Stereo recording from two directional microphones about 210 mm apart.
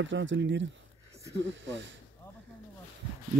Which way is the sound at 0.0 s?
65° right (ahead or behind).